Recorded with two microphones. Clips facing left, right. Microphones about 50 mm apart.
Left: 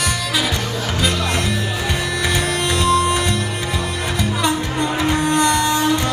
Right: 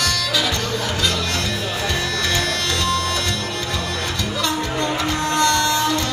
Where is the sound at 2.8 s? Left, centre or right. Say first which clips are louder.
Left 8 dB; centre.